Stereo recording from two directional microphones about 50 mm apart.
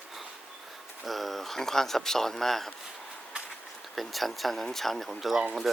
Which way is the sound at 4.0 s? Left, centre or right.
Centre.